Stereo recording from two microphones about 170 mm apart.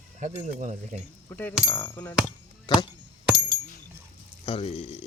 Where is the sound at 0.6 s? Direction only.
50° right (ahead or behind).